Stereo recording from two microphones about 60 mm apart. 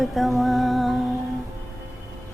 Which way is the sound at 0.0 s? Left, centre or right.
Centre.